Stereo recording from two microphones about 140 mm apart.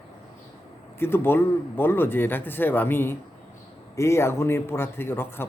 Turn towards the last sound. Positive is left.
turn(degrees=15)  # may be behind; listen again after turning